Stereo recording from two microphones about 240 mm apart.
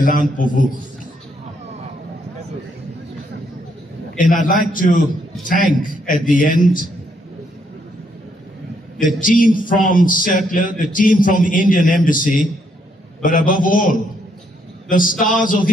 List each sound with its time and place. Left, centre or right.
0.0 s a man's voice: left
4.2 s a man's voice: left
6.0 s a man's voice: left
9.0 s a man's voice: left